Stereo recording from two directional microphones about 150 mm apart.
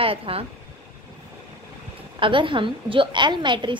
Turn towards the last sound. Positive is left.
turn(degrees=-30)  # may be behind; listen again after turning